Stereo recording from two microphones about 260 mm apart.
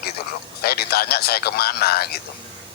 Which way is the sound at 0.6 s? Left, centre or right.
Left.